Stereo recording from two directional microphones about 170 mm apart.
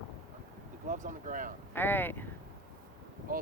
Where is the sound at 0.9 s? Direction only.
50° right (ahead or behind).